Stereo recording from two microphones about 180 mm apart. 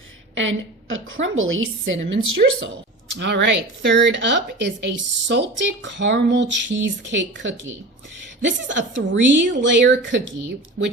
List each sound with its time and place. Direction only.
0.3 s speech: 90° right
2.4 s a woman's voice: 50° right (ahead or behind)
3.2 s speech: 75° right (ahead or behind)